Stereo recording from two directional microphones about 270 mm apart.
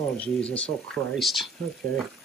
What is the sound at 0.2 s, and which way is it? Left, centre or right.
Speech, centre.